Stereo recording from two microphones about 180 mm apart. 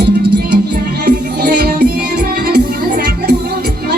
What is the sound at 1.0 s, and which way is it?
Music, 55° right (ahead or behind).